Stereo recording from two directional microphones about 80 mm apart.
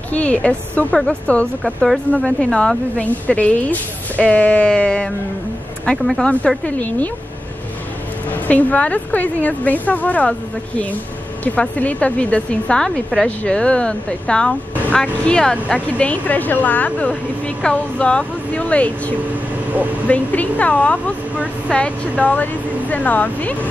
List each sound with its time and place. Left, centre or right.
0.1 s speech: centre
6.6 s a woman's voice: centre
8.5 s a woman's voice: centre
11.4 s a woman's voice: centre